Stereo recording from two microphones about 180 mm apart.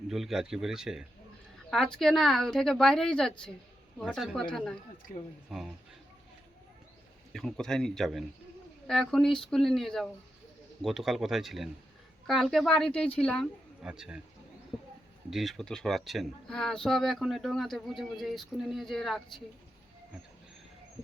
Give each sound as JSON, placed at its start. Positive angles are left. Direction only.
{"t": 0.1, "sound": "speech", "side_deg": 0}
{"t": 7.3, "sound": "a woman's voice", "side_deg": 0}
{"t": 15.3, "sound": "speech", "side_deg": 0}